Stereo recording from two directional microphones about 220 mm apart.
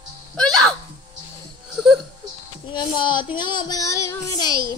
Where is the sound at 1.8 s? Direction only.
Centre (ahead or behind).